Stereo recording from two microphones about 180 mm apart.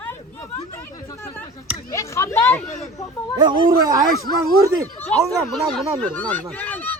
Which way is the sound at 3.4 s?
25° right (ahead or behind).